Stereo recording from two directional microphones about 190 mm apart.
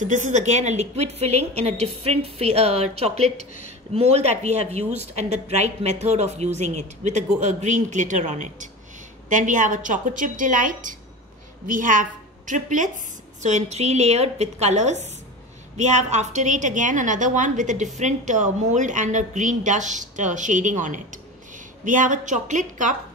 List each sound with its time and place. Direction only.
0.0 s a woman's voice: 40° right (ahead or behind)